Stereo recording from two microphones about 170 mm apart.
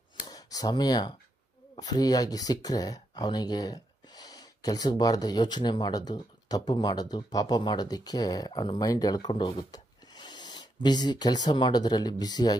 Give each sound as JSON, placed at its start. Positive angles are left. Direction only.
{"t": 0.3, "sound": "speech", "side_deg": 20}